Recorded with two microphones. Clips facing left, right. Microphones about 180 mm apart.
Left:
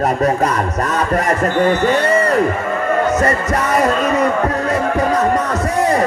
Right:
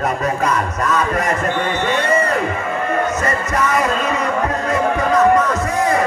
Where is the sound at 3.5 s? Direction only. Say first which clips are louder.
Left 1 dB; 35° left (ahead or behind).